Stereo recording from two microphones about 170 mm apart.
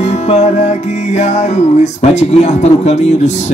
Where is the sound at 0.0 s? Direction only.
40° left (ahead or behind).